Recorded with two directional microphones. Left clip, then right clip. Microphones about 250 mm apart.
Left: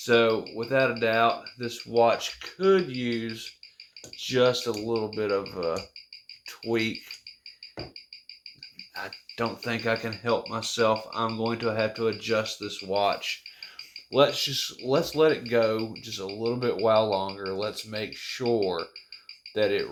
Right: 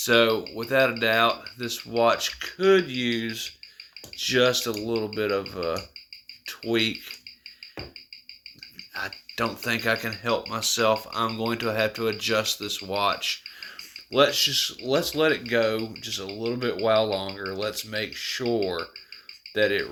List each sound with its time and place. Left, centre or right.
0.0 s speech: centre
9.0 s speech: centre